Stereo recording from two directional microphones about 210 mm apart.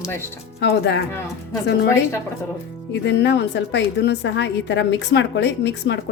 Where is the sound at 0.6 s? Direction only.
55° left (ahead or behind).